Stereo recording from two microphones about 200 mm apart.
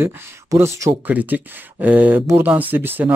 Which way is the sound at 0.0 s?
15° right (ahead or behind).